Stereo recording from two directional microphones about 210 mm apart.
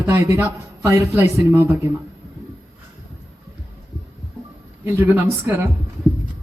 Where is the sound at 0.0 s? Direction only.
10° right (ahead or behind).